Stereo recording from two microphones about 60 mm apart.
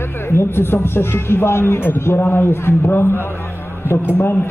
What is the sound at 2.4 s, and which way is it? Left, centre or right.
A man's voice, left.